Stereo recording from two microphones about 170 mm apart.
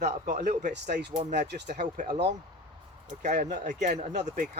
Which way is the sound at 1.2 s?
45° right (ahead or behind).